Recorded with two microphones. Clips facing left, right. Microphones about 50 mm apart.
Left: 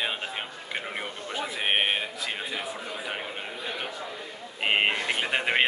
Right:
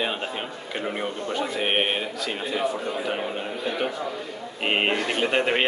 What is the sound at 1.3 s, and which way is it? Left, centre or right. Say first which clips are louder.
A man's voice: right 2 dB; centre.